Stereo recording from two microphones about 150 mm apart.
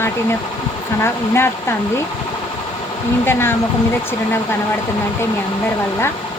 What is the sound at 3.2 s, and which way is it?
Speech, 15° left (ahead or behind).